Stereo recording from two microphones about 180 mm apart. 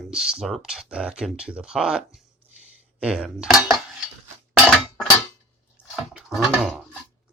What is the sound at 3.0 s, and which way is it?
Dishes, 5° right (ahead or behind).